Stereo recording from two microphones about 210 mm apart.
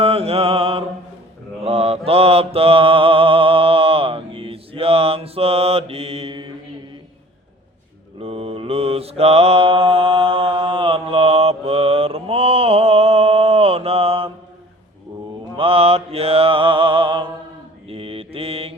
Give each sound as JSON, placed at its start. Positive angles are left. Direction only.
{"t": 0.0, "sound": "mantra", "side_deg": -30}
{"t": 8.2, "sound": "mantra", "side_deg": -25}
{"t": 15.5, "sound": "mantra", "side_deg": -25}